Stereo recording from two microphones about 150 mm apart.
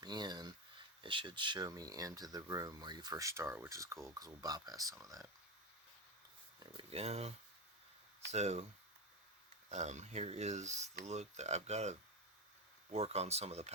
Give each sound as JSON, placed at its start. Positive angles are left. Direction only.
{"t": 0.0, "sound": "a sound", "side_deg": -30}
{"t": 1.0, "sound": "speech", "side_deg": -35}
{"t": 6.6, "sound": "speech", "side_deg": -40}
{"t": 9.6, "sound": "speech", "side_deg": -50}